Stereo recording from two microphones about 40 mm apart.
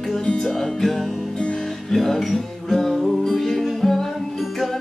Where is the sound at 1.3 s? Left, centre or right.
Centre.